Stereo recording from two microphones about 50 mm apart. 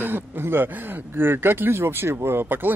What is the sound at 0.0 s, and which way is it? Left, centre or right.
Speech, right.